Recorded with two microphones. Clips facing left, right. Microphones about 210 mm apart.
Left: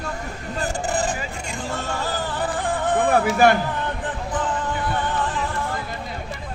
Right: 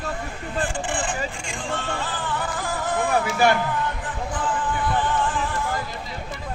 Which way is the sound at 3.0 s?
55° left (ahead or behind).